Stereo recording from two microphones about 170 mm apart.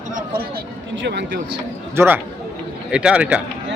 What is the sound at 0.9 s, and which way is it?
Speech, 90° right.